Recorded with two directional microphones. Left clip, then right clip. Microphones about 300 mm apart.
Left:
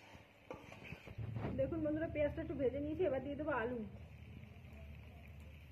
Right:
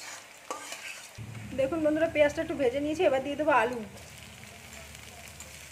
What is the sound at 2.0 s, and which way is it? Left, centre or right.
A woman's voice, centre.